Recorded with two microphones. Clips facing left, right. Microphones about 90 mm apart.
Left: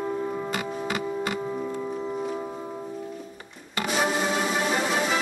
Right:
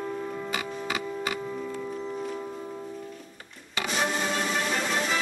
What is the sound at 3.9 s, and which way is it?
Music, 10° left (ahead or behind).